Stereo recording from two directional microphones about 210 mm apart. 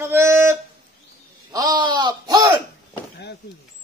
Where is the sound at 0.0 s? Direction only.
10° right (ahead or behind).